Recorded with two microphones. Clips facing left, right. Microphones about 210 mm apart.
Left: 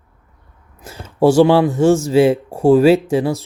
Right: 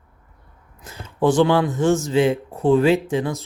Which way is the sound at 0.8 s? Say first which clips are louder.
Left 4 dB; 30° left (ahead or behind).